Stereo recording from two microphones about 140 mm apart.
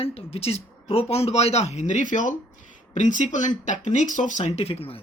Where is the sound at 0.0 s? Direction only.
45° left (ahead or behind).